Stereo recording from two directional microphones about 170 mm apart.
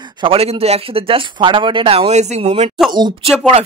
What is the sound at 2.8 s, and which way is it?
Speech, 25° right (ahead or behind).